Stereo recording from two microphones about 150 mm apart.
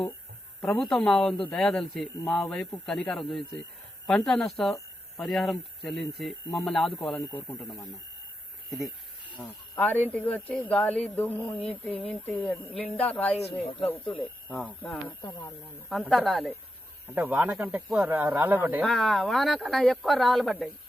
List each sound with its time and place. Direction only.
0.8 s speech: 5° left (ahead or behind)
9.4 s speech: 10° left (ahead or behind)
13.7 s speech: 35° left (ahead or behind)
14.5 s speech: centre (ahead or behind)
17.2 s speech: 10° right (ahead or behind)
18.9 s speech: centre (ahead or behind)